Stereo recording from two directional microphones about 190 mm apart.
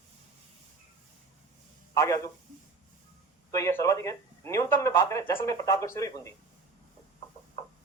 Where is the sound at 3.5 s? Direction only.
15° left (ahead or behind).